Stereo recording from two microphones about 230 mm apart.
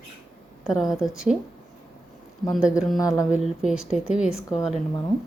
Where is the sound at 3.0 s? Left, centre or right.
Centre.